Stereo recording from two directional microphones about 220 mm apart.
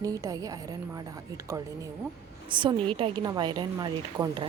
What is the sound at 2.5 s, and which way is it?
Speech, 20° right (ahead or behind).